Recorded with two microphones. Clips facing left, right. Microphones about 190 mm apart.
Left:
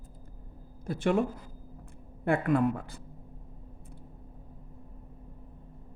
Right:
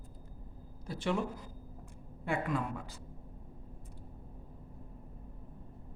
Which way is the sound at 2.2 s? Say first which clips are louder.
Left 9 dB; 55° left (ahead or behind).